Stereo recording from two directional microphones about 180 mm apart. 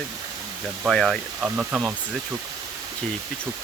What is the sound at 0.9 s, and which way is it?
Speech, centre (ahead or behind).